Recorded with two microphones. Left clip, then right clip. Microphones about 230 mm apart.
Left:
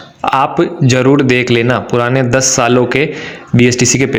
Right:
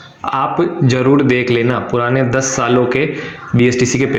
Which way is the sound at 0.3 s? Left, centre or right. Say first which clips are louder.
Left 4 dB; left.